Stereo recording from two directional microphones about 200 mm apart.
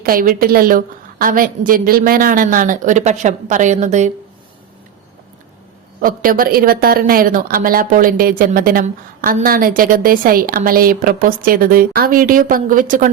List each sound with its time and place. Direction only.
0.0 s a woman's voice: 45° right (ahead or behind)
6.0 s a woman's voice: 45° right (ahead or behind)